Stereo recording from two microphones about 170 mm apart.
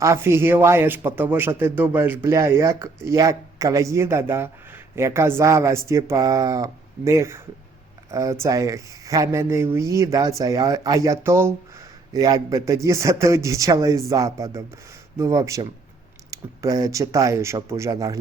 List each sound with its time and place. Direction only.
0.0 s speech: 15° right (ahead or behind)